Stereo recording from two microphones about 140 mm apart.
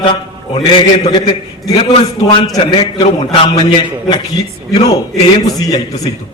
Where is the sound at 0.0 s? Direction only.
35° left (ahead or behind).